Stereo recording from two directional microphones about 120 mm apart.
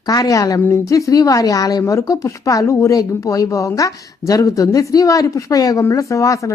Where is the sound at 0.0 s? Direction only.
35° left (ahead or behind).